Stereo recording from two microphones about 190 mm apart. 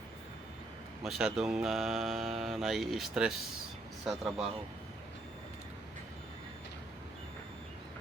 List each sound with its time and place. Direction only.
1.0 s mantra: centre (ahead or behind)